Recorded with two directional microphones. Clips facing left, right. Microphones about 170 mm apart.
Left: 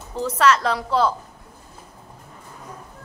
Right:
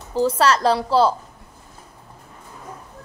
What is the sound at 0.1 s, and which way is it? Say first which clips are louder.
A woman's voice: right 1 dB; 30° right (ahead or behind).